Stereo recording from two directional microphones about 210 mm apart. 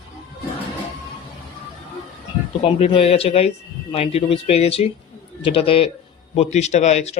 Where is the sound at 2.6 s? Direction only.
25° left (ahead or behind).